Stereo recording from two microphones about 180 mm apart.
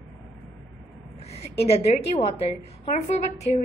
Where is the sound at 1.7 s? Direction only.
35° left (ahead or behind).